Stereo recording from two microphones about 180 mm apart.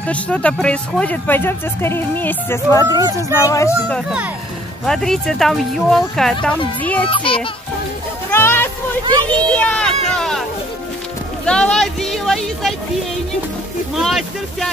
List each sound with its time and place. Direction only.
0.0 s speech: 5° left (ahead or behind)
4.8 s speech: centre (ahead or behind)
7.1 s a child's voice: 30° left (ahead or behind)
8.3 s music: 15° left (ahead or behind)
9.3 s speech: 5° left (ahead or behind)
11.4 s speech: 5° left (ahead or behind)
13.9 s speech: centre (ahead or behind)